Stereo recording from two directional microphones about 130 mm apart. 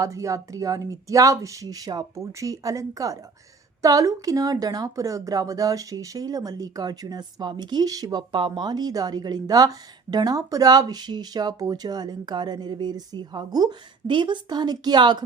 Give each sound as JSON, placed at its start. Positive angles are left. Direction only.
{"t": 0.0, "sound": "a woman's voice", "side_deg": -25}